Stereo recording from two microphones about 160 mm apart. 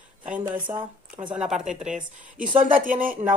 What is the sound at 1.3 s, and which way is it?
Speech, 5° right (ahead or behind).